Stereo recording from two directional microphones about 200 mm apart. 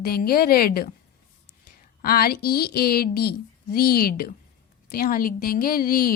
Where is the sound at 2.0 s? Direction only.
50° left (ahead or behind).